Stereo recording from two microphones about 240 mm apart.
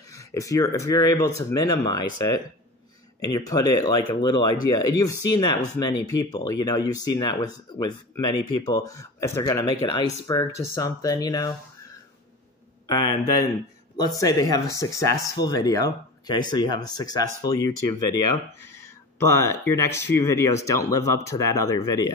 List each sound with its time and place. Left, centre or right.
0.1 s speech: centre
12.8 s speech: centre